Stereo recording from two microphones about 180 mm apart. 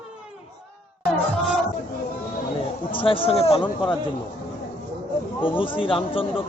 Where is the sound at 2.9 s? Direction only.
30° left (ahead or behind).